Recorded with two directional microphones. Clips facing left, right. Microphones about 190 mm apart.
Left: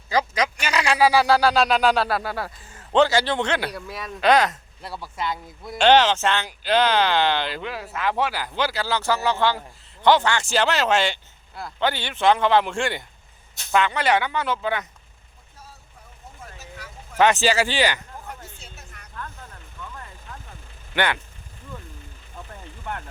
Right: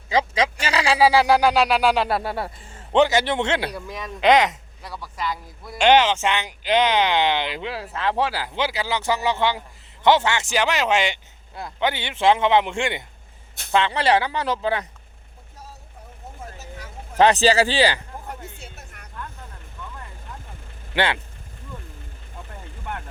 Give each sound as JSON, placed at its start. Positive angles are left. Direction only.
{"t": 0.1, "sound": "speech", "side_deg": -25}
{"t": 2.0, "sound": "speech", "side_deg": -25}
{"t": 3.8, "sound": "speech", "side_deg": 5}
{"t": 4.2, "sound": "speech", "side_deg": -20}
{"t": 4.8, "sound": "speech", "side_deg": 25}
{"t": 5.2, "sound": "speech", "side_deg": 0}
{"t": 5.7, "sound": "speech", "side_deg": -10}
{"t": 7.7, "sound": "speech", "side_deg": -30}
{"t": 17.2, "sound": "speech", "side_deg": -35}
{"t": 18.4, "sound": "music", "side_deg": -60}
{"t": 20.9, "sound": "speech", "side_deg": -25}